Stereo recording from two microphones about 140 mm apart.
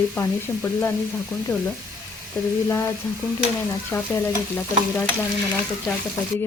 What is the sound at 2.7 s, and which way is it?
Speech, 20° left (ahead or behind).